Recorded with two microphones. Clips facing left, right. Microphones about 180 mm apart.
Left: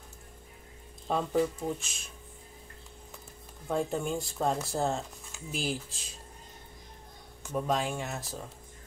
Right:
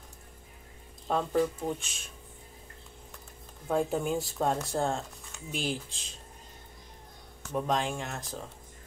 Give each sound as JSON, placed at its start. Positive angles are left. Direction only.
{"t": 1.0, "sound": "speech", "side_deg": 0}
{"t": 3.6, "sound": "speech", "side_deg": 0}
{"t": 7.5, "sound": "speech", "side_deg": 5}